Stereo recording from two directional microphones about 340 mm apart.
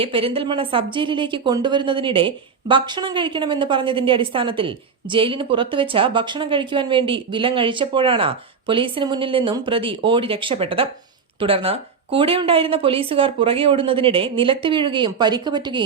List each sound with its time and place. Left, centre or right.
0.0 s a woman's voice: centre